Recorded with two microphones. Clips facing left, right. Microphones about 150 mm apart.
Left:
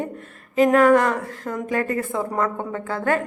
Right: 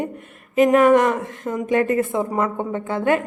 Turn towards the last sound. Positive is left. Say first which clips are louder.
# right 3 dB
turn(degrees=-20)  # may be behind; listen again after turning